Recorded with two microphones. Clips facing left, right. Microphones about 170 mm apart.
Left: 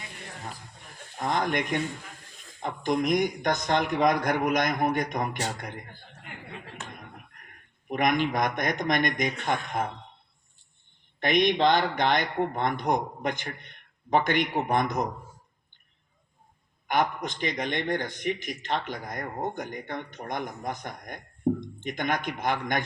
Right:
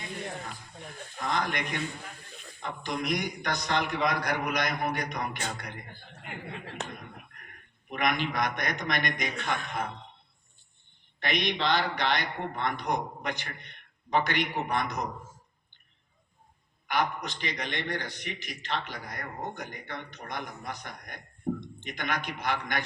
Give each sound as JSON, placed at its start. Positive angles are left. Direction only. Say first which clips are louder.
{"t": 1.2, "sound": "speech", "louder": "left 4 dB", "side_deg": 50}
{"t": 7.9, "sound": "speech", "louder": "left 4 dB", "side_deg": 45}
{"t": 11.2, "sound": "speech", "louder": "left 7 dB", "side_deg": 50}
{"t": 16.9, "sound": "speech", "louder": "left 3 dB", "side_deg": 50}
{"t": 21.5, "sound": "a sound", "louder": "left 6 dB", "side_deg": 45}
{"t": 21.8, "sound": "speech", "louder": "left 5 dB", "side_deg": 50}